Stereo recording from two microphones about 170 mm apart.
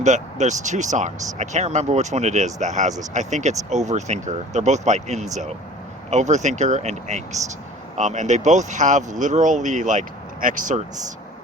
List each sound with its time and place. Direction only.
0.0 s speech: 45° right (ahead or behind)